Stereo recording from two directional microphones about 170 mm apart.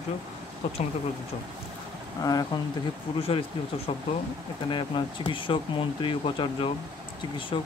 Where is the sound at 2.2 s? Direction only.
20° left (ahead or behind).